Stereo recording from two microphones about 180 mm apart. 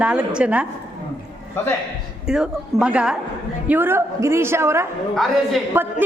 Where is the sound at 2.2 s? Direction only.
5° right (ahead or behind).